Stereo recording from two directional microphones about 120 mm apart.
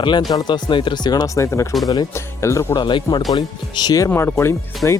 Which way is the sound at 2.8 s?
40° left (ahead or behind).